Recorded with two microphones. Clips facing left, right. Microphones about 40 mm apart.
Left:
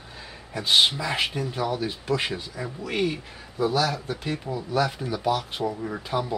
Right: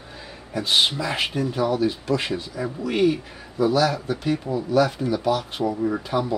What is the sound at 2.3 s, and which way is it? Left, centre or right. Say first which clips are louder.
Speech: right 5 dB; centre.